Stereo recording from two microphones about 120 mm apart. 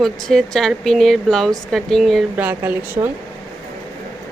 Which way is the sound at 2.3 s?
15° right (ahead or behind).